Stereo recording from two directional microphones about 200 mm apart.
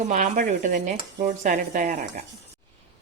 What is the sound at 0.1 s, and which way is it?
A woman's voice, 40° right (ahead or behind).